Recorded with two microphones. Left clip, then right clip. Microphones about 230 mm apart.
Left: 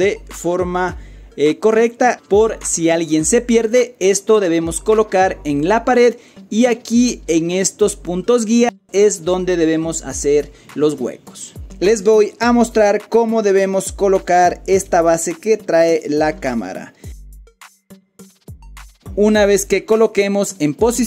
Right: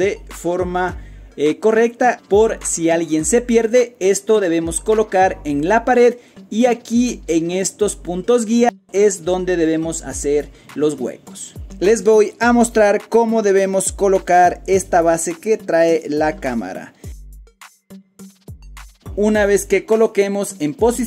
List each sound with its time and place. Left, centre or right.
0.4 s speech: centre
19.1 s speech: centre